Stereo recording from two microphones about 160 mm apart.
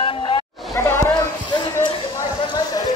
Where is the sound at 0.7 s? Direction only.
15° left (ahead or behind).